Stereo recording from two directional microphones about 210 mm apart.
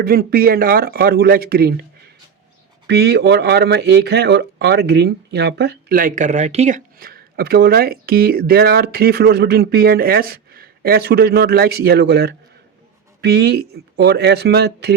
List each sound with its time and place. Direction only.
0.0 s speech: 45° right (ahead or behind)
2.8 s speech: 50° right (ahead or behind)